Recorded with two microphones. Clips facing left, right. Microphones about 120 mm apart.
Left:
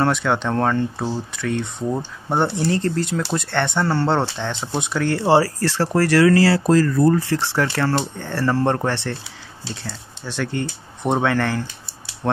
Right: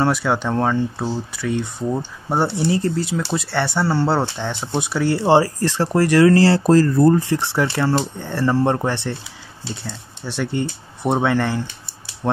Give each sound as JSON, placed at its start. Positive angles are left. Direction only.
{"t": 0.0, "sound": "speech", "side_deg": -5}
{"t": 6.2, "sound": "speech", "side_deg": -25}